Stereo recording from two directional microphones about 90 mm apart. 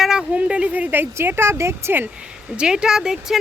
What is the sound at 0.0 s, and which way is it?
Speech, 5° right (ahead or behind).